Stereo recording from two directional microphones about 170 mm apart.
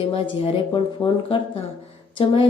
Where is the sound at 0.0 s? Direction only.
35° left (ahead or behind).